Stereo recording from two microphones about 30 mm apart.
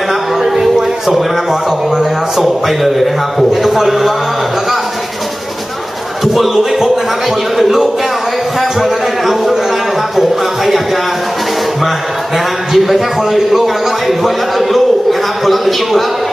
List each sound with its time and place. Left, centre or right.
0.4 s a sound: centre
1.5 s a man's voice: centre
6.2 s speech: centre
6.5 s music: centre
8.5 s a man's voice: centre
12.7 s a man's voice: centre